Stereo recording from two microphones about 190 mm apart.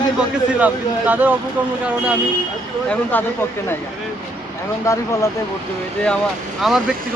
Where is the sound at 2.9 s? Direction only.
10° left (ahead or behind).